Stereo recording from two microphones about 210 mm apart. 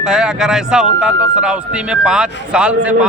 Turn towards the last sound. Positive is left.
turn(degrees=-5)  # may be behind; listen again after turning